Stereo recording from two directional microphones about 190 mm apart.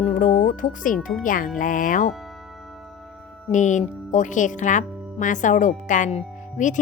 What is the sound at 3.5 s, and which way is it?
Speech, 40° left (ahead or behind).